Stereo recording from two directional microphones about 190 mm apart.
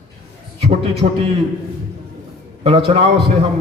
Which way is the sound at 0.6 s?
30° right (ahead or behind).